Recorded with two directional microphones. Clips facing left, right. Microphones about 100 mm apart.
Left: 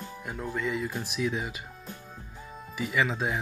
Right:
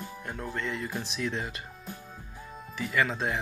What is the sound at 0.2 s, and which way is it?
Speech, 5° left (ahead or behind).